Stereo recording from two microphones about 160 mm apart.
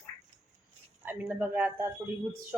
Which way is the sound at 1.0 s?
10° right (ahead or behind).